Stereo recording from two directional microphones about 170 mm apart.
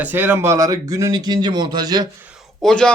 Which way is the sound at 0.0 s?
10° right (ahead or behind).